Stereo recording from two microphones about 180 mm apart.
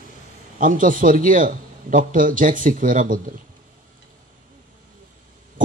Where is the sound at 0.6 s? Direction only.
50° right (ahead or behind).